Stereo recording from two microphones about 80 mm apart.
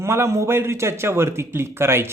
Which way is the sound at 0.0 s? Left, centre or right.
Right.